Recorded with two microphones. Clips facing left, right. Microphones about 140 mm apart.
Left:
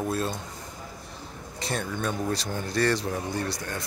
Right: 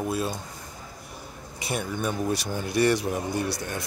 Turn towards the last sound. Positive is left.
turn(degrees=-15)  # may be behind; listen again after turning